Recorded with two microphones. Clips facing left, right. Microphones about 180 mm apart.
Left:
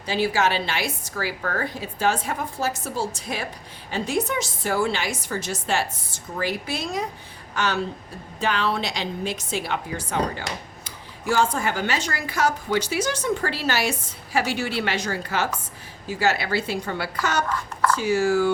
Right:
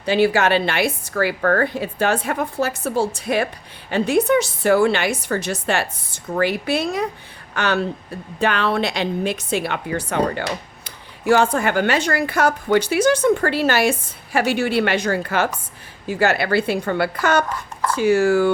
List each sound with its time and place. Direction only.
0.0 s a woman's voice: 60° right (ahead or behind)